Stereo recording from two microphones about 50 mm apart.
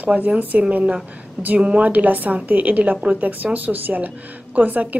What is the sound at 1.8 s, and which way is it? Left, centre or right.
Speech, right.